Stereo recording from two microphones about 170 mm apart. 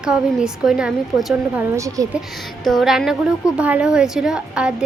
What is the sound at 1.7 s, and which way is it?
Speech, 20° right (ahead or behind).